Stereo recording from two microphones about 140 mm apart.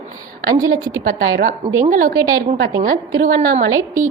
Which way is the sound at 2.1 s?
25° right (ahead or behind).